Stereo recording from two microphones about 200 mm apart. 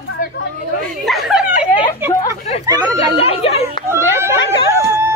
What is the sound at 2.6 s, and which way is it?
Speech, 20° right (ahead or behind).